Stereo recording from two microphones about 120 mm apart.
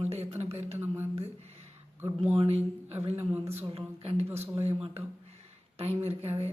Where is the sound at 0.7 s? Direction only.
20° right (ahead or behind).